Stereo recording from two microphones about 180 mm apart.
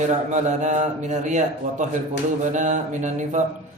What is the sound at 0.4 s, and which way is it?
A man's voice, 40° right (ahead or behind).